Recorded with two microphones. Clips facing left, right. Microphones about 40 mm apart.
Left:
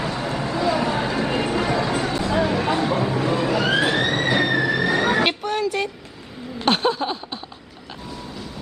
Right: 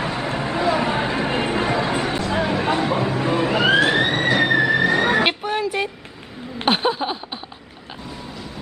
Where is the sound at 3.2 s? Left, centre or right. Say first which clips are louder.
Right 4 dB; right.